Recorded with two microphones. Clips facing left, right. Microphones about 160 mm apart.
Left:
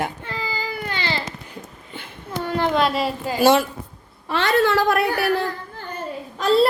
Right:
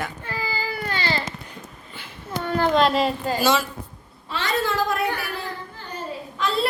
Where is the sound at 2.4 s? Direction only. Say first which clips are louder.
Even; 25° left (ahead or behind).